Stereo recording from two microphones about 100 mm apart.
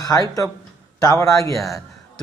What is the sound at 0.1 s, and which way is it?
Speech, 35° left (ahead or behind).